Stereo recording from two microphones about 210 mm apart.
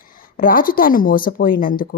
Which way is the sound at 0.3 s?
45° left (ahead or behind).